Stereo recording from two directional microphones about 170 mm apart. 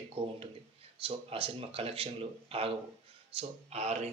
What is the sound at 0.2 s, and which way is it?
A man's voice, 35° right (ahead or behind).